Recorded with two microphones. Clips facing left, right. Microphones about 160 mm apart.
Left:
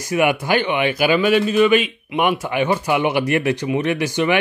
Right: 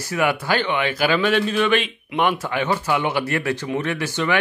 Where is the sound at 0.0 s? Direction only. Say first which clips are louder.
Left 4 dB; 15° left (ahead or behind).